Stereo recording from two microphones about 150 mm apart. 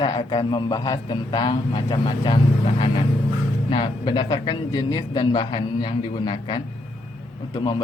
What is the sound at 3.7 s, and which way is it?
Speech, 30° left (ahead or behind).